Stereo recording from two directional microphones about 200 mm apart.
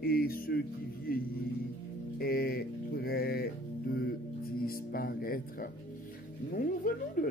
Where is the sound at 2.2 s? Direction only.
50° left (ahead or behind).